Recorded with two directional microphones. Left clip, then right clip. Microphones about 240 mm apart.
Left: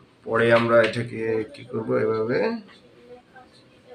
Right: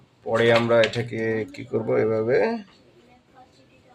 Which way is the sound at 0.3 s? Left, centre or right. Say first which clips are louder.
Even; right.